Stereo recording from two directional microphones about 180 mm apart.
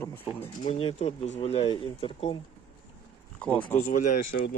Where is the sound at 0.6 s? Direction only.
35° left (ahead or behind).